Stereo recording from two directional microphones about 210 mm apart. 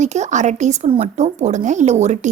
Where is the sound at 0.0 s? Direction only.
35° right (ahead or behind).